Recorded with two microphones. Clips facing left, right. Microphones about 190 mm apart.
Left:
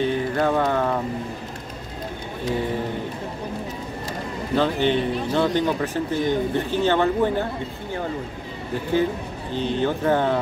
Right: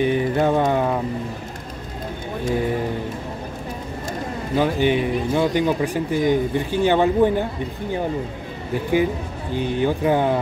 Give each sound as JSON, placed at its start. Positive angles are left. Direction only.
{"t": 0.0, "sound": "mantra", "side_deg": -15}
{"t": 4.6, "sound": "speech", "side_deg": -10}
{"t": 9.5, "sound": "speech", "side_deg": -10}